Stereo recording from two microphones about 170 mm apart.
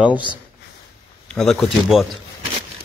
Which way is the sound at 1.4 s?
Centre (ahead or behind).